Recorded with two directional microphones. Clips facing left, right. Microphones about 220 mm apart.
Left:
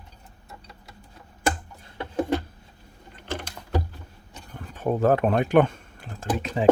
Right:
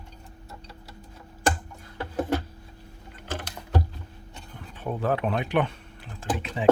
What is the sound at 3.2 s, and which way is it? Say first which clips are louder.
Typing: left 2 dB; 5° right (ahead or behind).